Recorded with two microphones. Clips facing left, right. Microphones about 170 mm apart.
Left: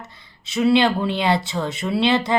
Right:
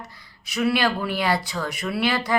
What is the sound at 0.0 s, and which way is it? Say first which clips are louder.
Speech: even; 25° left (ahead or behind).